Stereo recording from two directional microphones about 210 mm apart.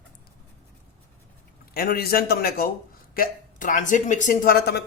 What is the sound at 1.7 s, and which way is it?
Speech, 45° left (ahead or behind).